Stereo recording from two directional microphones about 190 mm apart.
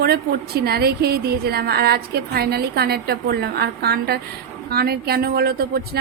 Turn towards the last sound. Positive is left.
turn(degrees=-55)  # may be behind; listen again after turning